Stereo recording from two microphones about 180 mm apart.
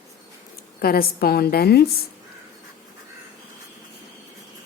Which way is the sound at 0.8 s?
55° left (ahead or behind).